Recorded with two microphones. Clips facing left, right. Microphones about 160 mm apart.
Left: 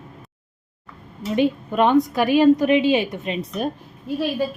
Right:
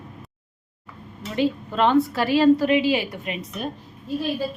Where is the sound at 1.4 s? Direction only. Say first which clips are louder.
Left 3 dB; 15° left (ahead or behind).